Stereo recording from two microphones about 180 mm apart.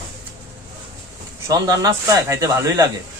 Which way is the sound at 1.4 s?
20° right (ahead or behind).